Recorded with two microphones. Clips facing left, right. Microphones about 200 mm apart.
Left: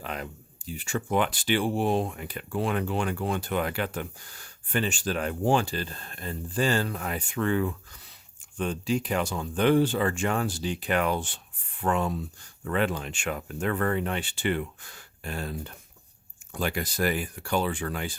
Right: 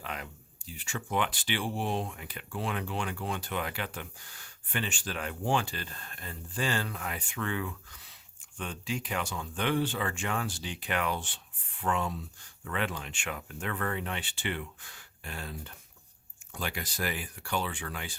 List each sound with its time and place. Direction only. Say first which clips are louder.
0.0 s speech: left 5 dB; 40° left (ahead or behind)